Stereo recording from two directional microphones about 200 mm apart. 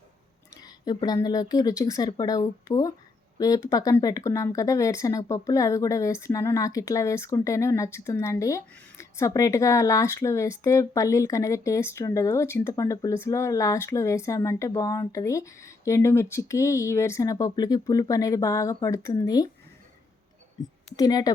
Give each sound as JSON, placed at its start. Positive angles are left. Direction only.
{"t": 0.5, "sound": "a sound", "side_deg": 20}
{"t": 0.9, "sound": "speech", "side_deg": 20}
{"t": 20.9, "sound": "speech", "side_deg": 20}